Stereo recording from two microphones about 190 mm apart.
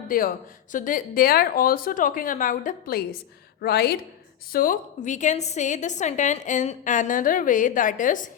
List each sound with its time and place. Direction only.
0.1 s a woman's voice: 50° left (ahead or behind)